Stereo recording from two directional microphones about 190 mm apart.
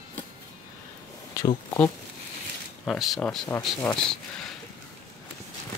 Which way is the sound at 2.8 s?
Centre (ahead or behind).